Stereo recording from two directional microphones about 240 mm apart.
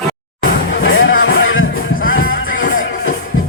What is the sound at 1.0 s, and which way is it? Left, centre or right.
Music, left.